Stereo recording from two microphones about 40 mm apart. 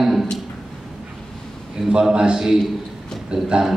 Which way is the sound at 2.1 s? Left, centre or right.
Right.